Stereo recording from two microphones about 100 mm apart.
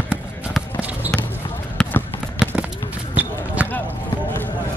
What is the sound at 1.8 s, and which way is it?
Basketball bounce, 10° left (ahead or behind).